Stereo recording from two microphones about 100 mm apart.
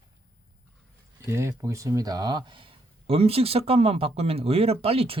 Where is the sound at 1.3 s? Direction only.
25° right (ahead or behind); by 5.1 s 80° right.